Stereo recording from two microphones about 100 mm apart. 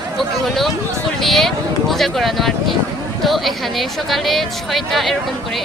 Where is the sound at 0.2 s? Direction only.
Centre (ahead or behind).